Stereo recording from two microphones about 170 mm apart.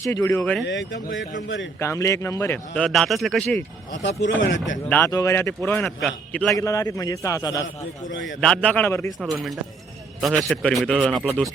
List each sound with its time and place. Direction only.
0.0 s a man's voice: 15° left (ahead or behind)
0.6 s speech: 90° left
1.8 s a man's voice: 15° left (ahead or behind)
4.2 s speech: 90° left
4.9 s a man's voice: 10° left (ahead or behind)
6.6 s a man's voice: 20° left (ahead or behind)
8.1 s speech: 90° left
8.4 s a man's voice: 5° left (ahead or behind)
9.2 s speech: centre (ahead or behind)